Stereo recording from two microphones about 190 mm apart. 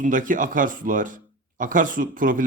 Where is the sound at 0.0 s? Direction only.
45° right (ahead or behind).